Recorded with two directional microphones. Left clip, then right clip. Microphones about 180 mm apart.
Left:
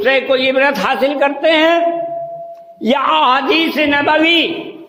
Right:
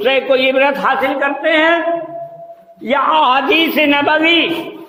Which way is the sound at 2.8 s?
70° left (ahead or behind).